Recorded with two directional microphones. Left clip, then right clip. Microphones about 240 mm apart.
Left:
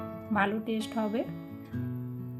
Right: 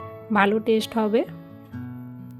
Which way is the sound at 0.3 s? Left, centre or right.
Right.